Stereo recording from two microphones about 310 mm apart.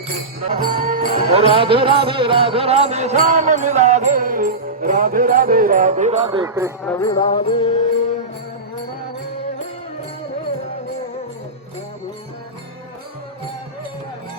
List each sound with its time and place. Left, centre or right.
0.6 s music: right; by 6.7 s centre
6.8 s music: centre